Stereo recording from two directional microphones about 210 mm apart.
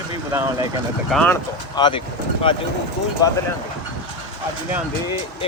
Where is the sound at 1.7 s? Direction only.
20° left (ahead or behind).